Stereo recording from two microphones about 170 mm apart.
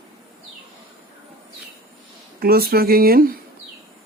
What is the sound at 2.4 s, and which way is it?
Speech, 60° right (ahead or behind).